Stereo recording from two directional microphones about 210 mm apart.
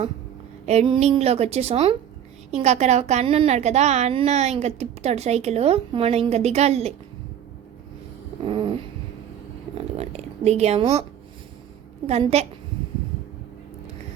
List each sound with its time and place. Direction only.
0.6 s a woman's voice: 30° right (ahead or behind)
8.4 s a sound: 25° right (ahead or behind)
9.7 s zipper: 30° right (ahead or behind)
12.0 s a woman's voice: 30° right (ahead or behind)